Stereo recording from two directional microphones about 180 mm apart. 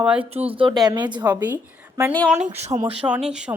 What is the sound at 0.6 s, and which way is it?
Speech, 25° right (ahead or behind).